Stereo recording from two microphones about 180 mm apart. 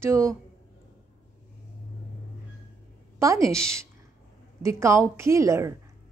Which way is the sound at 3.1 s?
15° right (ahead or behind).